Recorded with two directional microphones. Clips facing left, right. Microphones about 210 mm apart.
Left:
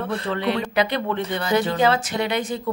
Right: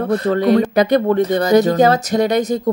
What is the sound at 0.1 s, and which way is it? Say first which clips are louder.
Speech: right 11 dB; 40° right (ahead or behind).